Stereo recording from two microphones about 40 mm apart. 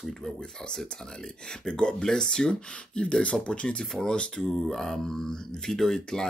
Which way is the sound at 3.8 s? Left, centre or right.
Centre.